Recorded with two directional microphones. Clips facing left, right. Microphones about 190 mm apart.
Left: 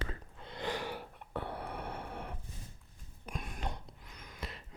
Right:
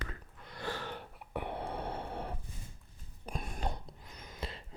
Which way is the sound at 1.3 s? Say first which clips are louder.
Right 2 dB; 20° right (ahead or behind).